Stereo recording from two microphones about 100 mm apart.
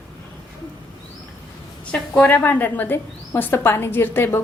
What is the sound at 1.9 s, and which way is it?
A woman's voice, 15° left (ahead or behind).